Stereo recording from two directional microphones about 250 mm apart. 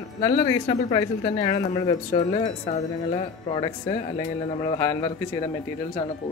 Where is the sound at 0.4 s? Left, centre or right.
Left.